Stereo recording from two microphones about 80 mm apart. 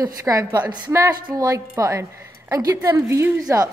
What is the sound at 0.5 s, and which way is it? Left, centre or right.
Speech, right.